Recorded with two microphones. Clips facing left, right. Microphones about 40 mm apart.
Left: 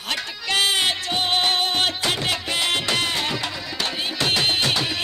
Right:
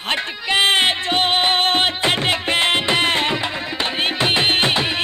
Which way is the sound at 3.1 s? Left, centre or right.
Right.